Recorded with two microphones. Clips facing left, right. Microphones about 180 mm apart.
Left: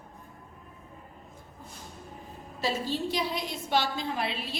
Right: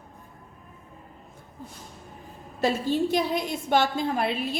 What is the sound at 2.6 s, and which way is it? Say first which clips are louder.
A woman's voice: right 6 dB; 50° right (ahead or behind).